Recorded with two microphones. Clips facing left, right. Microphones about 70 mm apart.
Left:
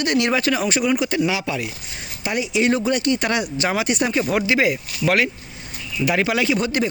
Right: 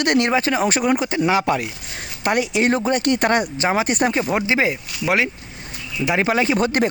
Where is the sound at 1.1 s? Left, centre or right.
Right.